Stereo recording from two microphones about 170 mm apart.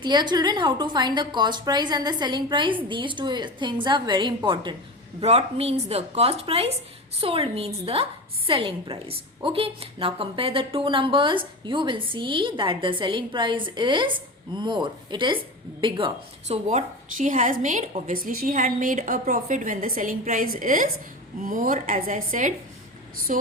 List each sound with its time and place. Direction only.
0.0 s a woman's voice: 25° right (ahead or behind)
16.6 s a woman's voice: 45° right (ahead or behind)